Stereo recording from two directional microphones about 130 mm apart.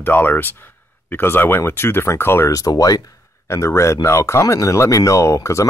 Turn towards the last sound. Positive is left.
turn(degrees=25)  # may be behind; listen again after turning